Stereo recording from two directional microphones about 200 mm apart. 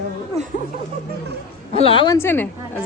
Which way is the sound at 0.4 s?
30° right (ahead or behind).